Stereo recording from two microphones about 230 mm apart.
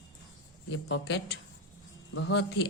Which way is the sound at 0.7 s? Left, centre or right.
Left.